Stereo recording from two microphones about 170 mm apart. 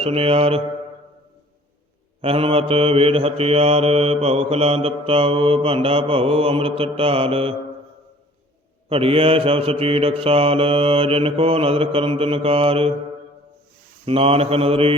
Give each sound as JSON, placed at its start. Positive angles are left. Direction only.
{"t": 0.0, "sound": "mantra", "side_deg": -35}
{"t": 2.2, "sound": "mantra", "side_deg": -35}
{"t": 8.9, "sound": "mantra", "side_deg": -35}
{"t": 14.0, "sound": "mantra", "side_deg": -35}